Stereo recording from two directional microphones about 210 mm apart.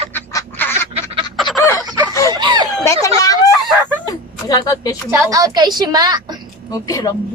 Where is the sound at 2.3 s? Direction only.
20° right (ahead or behind).